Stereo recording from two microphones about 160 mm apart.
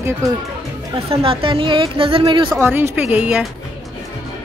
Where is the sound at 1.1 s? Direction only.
35° right (ahead or behind).